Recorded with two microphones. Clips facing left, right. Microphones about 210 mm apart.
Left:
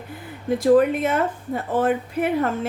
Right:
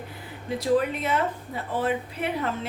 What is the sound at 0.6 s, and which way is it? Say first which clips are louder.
A woman's voice: left 7 dB; 50° left (ahead or behind).